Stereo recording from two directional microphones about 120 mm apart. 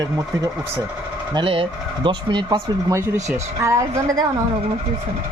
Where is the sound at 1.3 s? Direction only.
50° right (ahead or behind); by 3.8 s 25° right (ahead or behind).